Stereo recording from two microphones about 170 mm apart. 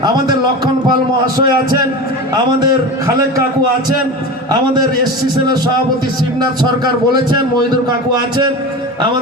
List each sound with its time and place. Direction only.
0.0 s a man's voice: 25° right (ahead or behind)
2.3 s a man's voice: 25° right (ahead or behind)
6.6 s a man's voice: 25° right (ahead or behind)